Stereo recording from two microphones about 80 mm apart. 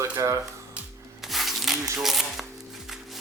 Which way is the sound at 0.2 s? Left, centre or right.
Right.